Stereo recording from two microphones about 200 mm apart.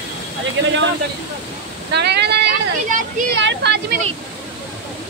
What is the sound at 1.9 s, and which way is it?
Speech, 55° right (ahead or behind).